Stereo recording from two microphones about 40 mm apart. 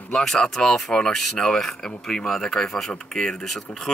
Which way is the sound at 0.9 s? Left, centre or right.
Centre.